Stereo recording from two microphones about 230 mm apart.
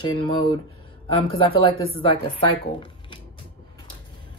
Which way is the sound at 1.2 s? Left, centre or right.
Left.